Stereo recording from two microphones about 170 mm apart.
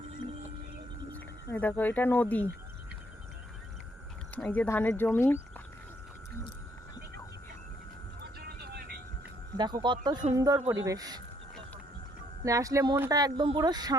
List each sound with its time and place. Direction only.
1.1 s speech: 10° left (ahead or behind)
4.4 s speech: 5° left (ahead or behind)
8.4 s vehicle: 70° right (ahead or behind)
9.6 s speech: 25° right (ahead or behind)
12.5 s speech: 20° right (ahead or behind)